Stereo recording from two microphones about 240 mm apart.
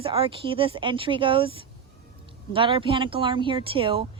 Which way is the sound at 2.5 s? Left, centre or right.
Right.